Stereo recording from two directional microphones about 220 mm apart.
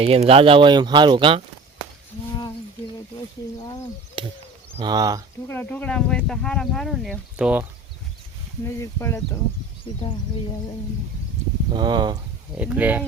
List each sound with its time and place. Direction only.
0.0 s speech: 25° right (ahead or behind)
4.2 s speech: 25° right (ahead or behind)
5.5 s speech: 10° left (ahead or behind)
8.6 s speech: 10° left (ahead or behind)
9.9 s speech: 25° left (ahead or behind)
11.7 s speech: 20° right (ahead or behind)
12.5 s speech: 5° right (ahead or behind)